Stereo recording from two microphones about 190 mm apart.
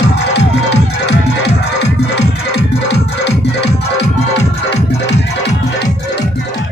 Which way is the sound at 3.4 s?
65° left (ahead or behind).